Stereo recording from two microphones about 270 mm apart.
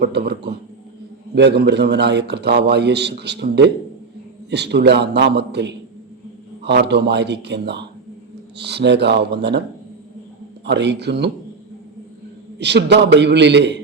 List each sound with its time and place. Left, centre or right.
0.0 s a man's voice: right
10.7 s a man's voice: right
12.5 s a man's voice: right